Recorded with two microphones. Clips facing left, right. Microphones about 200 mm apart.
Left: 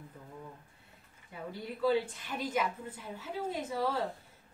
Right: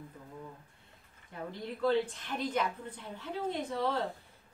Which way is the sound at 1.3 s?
10° left (ahead or behind).